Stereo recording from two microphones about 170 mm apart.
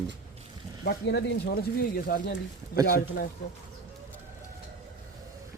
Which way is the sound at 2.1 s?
60° left (ahead or behind).